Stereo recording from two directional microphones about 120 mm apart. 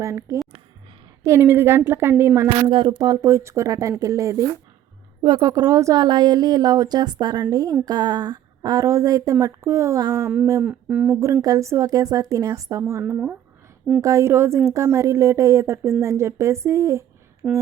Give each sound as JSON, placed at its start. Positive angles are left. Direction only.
{"t": 0.0, "sound": "speech", "side_deg": -25}
{"t": 2.6, "sound": "speech", "side_deg": -40}
{"t": 3.0, "sound": "speech", "side_deg": -30}
{"t": 10.6, "sound": "speech", "side_deg": -10}
{"t": 11.4, "sound": "speech", "side_deg": -25}
{"t": 17.4, "sound": "a sound", "side_deg": 0}